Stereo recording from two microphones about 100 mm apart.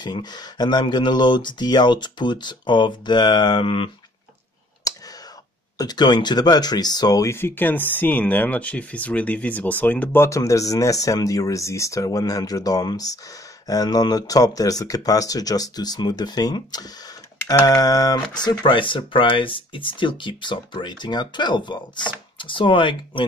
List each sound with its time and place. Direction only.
0.0 s speech: 45° left (ahead or behind)
4.9 s clicking: 35° left (ahead or behind)
5.8 s speech: 45° left (ahead or behind)